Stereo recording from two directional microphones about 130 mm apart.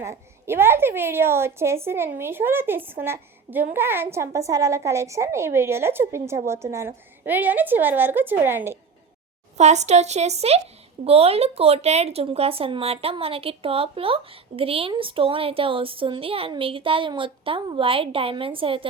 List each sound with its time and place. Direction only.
0.0 s a woman's voice: 20° right (ahead or behind)
9.6 s a woman's voice: 60° right (ahead or behind); by 18.9 s 45° right (ahead or behind)